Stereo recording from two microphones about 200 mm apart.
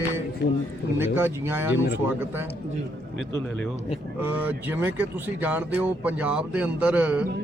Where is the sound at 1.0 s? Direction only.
10° right (ahead or behind).